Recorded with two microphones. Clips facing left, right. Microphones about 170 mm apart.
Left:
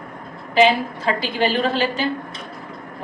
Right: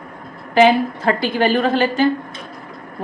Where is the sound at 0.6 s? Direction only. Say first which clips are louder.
Right 3 dB; 55° right (ahead or behind).